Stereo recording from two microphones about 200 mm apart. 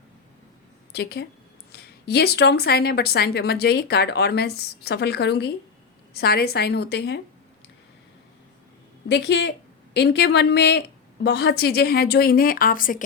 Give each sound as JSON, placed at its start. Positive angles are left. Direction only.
{"t": 0.9, "sound": "a woman's voice", "side_deg": 55}
{"t": 9.0, "sound": "speech", "side_deg": 60}